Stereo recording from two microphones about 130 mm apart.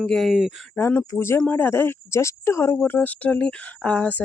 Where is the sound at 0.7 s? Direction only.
15° left (ahead or behind).